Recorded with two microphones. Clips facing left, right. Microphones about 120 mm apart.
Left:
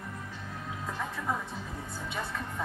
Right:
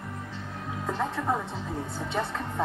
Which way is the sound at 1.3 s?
25° right (ahead or behind).